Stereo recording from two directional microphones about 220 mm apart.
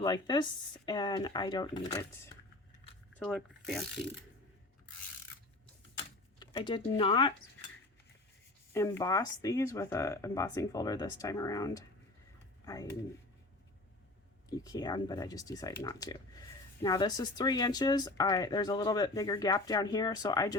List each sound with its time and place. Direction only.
0.0 s speech: 20° left (ahead or behind)
3.2 s speech: 5° left (ahead or behind)
6.4 s speech: 20° left (ahead or behind)
8.7 s speech: 15° left (ahead or behind)
14.5 s speech: 15° left (ahead or behind)